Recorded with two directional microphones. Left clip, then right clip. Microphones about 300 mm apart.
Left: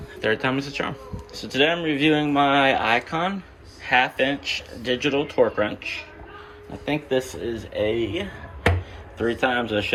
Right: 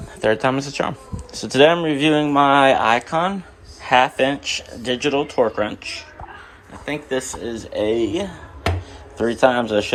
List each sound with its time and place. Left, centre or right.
0.2 s speech: centre
9.4 s speech: right
9.6 s speech: centre